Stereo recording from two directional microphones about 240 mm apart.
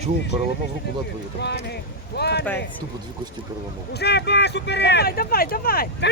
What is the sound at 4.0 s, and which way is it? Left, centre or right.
Speech, left.